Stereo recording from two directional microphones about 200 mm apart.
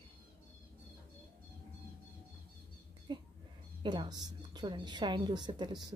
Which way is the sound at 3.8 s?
20° right (ahead or behind).